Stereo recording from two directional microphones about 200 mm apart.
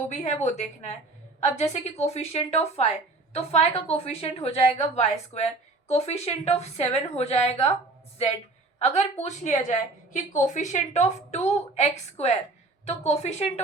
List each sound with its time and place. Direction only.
0.1 s a woman's voice: 35° left (ahead or behind)
8.8 s a woman's voice: 35° left (ahead or behind)